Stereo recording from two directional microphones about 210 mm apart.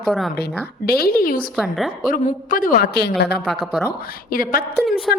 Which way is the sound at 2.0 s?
40° left (ahead or behind).